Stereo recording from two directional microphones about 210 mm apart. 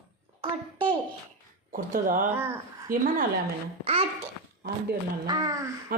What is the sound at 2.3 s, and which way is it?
Speech, 10° right (ahead or behind).